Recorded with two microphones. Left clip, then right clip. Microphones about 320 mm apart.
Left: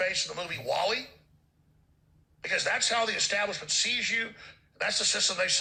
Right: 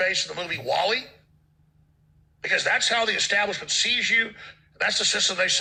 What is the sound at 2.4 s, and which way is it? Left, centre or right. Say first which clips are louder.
A man's voice: right 6 dB; right.